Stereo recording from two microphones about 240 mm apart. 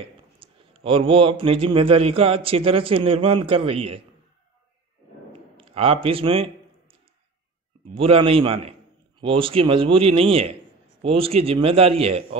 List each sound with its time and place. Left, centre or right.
0.4 s a sound: right
1.4 s a man's voice: right
5.6 s speech: right
7.9 s a man's voice: right